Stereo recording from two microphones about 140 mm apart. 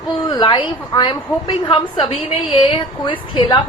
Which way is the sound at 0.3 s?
35° left (ahead or behind).